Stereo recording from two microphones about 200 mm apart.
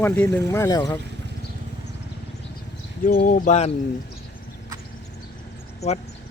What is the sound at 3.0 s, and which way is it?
Speech, 45° left (ahead or behind).